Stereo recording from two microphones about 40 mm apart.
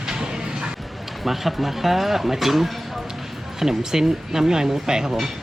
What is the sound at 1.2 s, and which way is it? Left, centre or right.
Speech, centre.